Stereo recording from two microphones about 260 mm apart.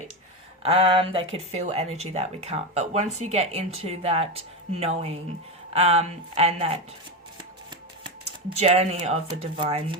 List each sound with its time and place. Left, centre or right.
0.6 s speech: right
8.4 s speech: right